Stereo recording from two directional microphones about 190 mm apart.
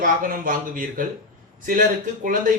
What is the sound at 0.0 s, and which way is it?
Speech, 45° right (ahead or behind).